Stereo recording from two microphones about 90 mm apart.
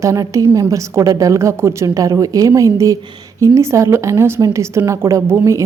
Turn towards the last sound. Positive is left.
turn(degrees=-30)  # may be behind; listen again after turning